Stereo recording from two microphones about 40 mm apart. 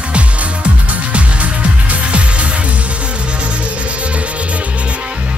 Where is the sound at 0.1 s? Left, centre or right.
Right.